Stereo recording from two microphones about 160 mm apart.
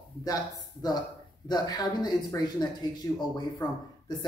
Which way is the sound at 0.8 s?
25° left (ahead or behind).